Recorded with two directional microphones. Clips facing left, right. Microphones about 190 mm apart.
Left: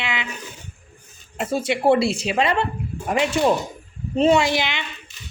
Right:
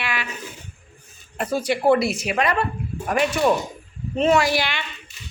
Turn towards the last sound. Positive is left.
turn(degrees=20)  # may be behind; listen again after turning